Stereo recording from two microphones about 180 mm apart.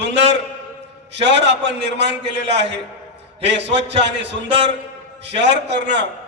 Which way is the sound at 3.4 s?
75° right (ahead or behind).